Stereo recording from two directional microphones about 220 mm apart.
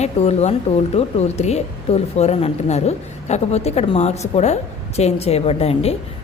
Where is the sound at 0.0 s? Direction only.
30° left (ahead or behind).